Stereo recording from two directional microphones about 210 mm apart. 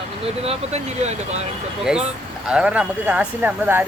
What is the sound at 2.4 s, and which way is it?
Speech, 5° right (ahead or behind).